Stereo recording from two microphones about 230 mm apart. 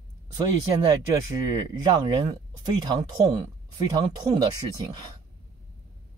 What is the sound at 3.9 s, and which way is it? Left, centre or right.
Speech, centre.